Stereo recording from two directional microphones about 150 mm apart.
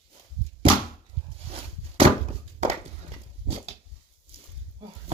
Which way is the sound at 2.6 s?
45° right (ahead or behind).